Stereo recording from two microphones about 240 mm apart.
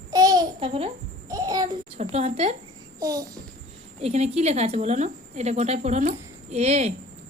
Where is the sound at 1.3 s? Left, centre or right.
Centre.